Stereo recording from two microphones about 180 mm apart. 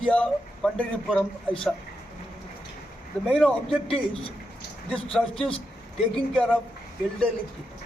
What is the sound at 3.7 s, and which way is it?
Speech, 30° left (ahead or behind).